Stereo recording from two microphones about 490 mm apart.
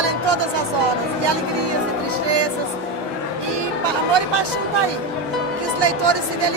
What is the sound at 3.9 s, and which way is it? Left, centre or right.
Speech, right.